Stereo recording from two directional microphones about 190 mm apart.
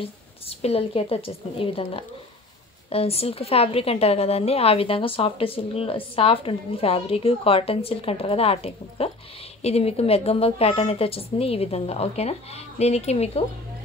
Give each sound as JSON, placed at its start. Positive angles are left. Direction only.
{"t": 0.0, "sound": "a woman's voice", "side_deg": 30}